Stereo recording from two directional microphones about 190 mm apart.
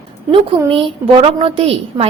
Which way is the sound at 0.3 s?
30° right (ahead or behind).